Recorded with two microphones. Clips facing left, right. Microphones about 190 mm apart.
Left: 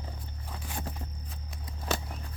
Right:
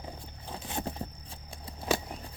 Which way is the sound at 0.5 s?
25° right (ahead or behind).